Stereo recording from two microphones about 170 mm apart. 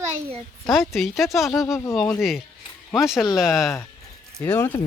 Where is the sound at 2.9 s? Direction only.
Centre (ahead or behind).